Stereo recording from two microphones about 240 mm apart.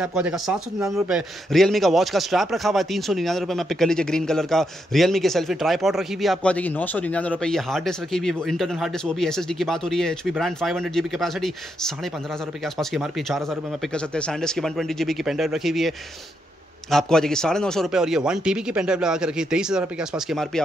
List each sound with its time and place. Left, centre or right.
0.0 s a man's voice: centre
16.9 s a man's voice: centre